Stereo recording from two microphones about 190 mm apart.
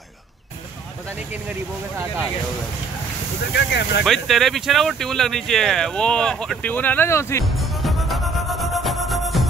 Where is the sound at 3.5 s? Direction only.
65° left (ahead or behind).